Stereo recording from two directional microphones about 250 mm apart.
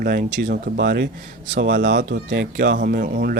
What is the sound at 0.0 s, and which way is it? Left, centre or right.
Speech, right.